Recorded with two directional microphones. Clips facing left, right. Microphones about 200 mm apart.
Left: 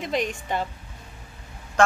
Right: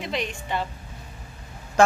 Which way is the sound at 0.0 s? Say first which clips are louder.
Left 3 dB; 45° left (ahead or behind).